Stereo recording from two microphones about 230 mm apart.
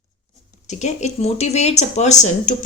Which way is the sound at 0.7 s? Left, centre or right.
Left.